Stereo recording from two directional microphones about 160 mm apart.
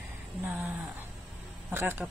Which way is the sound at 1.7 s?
15° right (ahead or behind).